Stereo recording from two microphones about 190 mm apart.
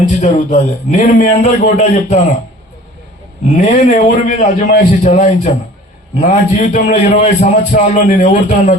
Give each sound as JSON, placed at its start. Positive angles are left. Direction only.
{"t": 0.2, "sound": "a man's voice", "side_deg": 40}
{"t": 3.6, "sound": "a man's voice", "side_deg": 35}